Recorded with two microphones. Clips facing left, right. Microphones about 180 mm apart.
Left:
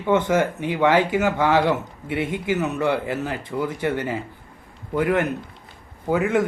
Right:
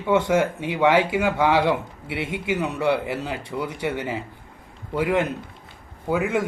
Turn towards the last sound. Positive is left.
turn(degrees=-10)  # may be behind; listen again after turning